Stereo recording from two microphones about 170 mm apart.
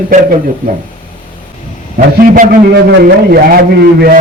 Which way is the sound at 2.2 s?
55° right (ahead or behind).